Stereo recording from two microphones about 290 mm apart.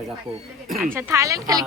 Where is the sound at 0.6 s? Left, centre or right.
Centre.